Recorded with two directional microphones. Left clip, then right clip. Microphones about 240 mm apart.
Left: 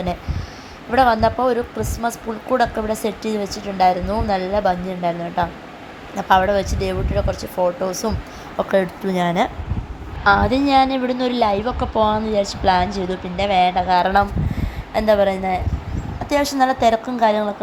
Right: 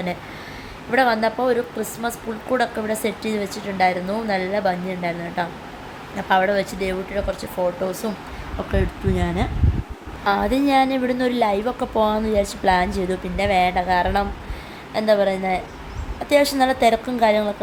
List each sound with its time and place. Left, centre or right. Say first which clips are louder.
0.9 s a woman's voice: left 3 dB; centre
8.5 s speech: left 7 dB; left
10.2 s a woman's voice: left 4 dB; centre